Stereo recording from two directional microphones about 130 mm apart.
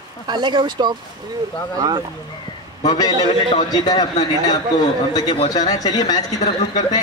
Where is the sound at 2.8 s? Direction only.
30° left (ahead or behind).